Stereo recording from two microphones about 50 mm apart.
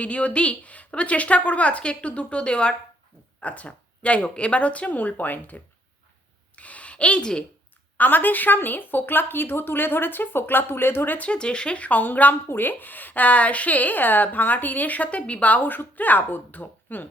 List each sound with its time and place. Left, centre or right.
0.0 s a woman's voice: left
6.6 s a sound: left
7.9 s a woman's voice: left
11.2 s a woman's voice: centre; by 17.1 s left